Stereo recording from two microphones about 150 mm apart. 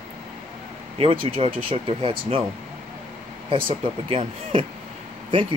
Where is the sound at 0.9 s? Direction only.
40° right (ahead or behind).